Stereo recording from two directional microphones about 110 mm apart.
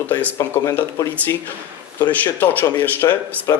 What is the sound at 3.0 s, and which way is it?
Speech, 25° left (ahead or behind).